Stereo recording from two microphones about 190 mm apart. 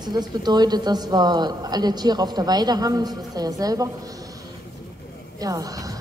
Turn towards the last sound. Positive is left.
turn(degrees=-20)  # may be behind; listen again after turning